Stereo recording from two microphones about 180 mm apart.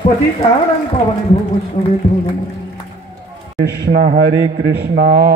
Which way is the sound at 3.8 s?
65° right (ahead or behind).